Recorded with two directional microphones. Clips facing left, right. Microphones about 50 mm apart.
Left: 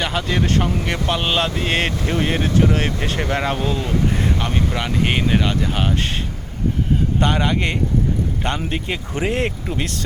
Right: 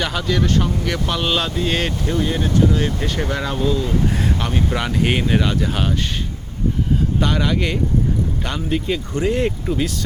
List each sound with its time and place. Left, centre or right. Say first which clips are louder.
0.0 s speech: left 1 dB; centre
0.6 s speech: even; left
1.0 s speech: left 2 dB; centre
1.5 s speech: even; left
4.4 s speech: right 1 dB; centre
7.2 s speech: left 2 dB; centre
8.9 s speech: right 1 dB; left
9.4 s speech: right 2 dB; centre